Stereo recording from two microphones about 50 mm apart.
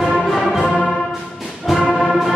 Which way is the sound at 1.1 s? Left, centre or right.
Centre.